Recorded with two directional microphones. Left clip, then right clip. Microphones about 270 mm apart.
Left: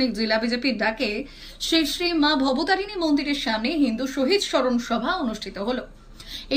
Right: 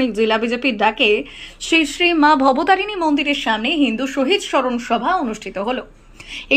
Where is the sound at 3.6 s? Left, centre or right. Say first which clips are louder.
Right 6 dB; right.